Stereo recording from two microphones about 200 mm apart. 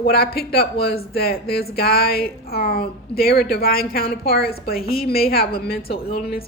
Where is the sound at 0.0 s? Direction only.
50° left (ahead or behind).